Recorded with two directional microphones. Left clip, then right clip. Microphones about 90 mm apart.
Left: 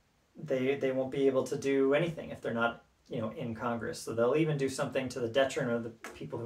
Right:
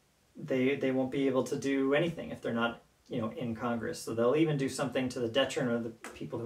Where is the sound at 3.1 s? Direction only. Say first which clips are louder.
Right 1 dB; 20° left (ahead or behind).